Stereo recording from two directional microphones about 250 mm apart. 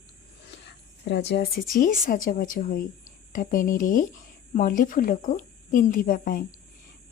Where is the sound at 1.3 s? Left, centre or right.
Left.